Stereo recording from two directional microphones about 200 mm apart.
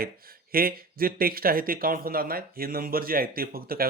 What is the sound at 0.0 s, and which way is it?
A man's voice, 50° right (ahead or behind).